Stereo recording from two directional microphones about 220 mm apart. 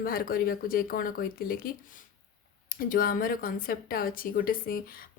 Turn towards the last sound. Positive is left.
turn(degrees=40)  # may be behind; listen again after turning